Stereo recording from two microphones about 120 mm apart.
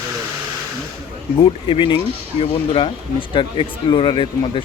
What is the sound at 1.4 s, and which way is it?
Speech, 50° left (ahead or behind).